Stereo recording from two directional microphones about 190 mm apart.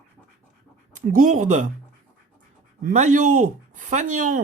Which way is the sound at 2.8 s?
40° right (ahead or behind).